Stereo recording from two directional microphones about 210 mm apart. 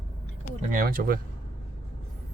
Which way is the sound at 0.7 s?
45° right (ahead or behind).